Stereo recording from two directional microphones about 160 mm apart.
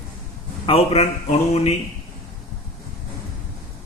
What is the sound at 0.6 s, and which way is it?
Speech, 40° left (ahead or behind).